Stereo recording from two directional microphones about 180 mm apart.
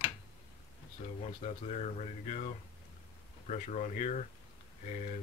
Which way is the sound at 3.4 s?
45° left (ahead or behind).